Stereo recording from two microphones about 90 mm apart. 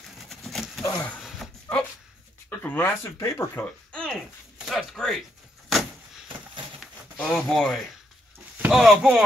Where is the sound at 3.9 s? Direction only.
10° left (ahead or behind).